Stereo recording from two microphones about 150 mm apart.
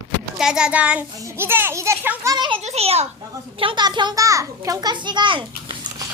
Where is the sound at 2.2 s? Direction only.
30° right (ahead or behind).